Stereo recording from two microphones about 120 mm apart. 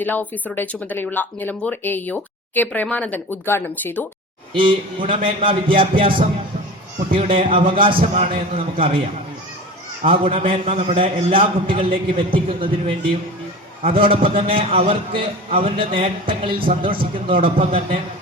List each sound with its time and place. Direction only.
0.0 s speech: 15° left (ahead or behind)
4.5 s a man's voice: 45° right (ahead or behind)
8.1 s a man's voice: 65° right (ahead or behind)
10.0 s a man's voice: 50° right (ahead or behind)